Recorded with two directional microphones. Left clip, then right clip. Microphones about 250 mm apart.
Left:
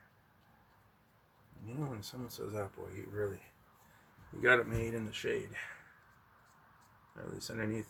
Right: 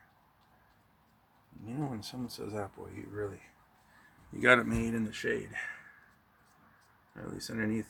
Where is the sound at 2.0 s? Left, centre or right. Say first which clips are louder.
Right 3 dB; right.